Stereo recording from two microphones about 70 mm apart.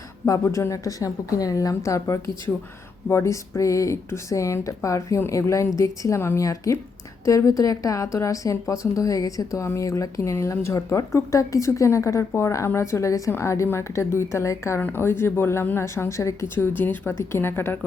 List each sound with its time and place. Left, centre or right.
0.4 s a woman's voice: left
14.8 s speech: left
15.0 s speech: left
16.6 s speech: left